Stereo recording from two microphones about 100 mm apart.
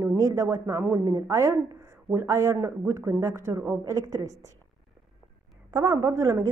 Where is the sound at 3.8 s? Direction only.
35° right (ahead or behind).